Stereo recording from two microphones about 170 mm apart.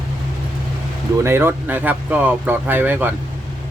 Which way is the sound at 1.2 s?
15° right (ahead or behind).